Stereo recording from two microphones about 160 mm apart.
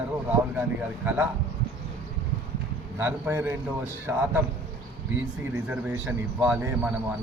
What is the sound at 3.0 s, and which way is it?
Speech, 15° right (ahead or behind).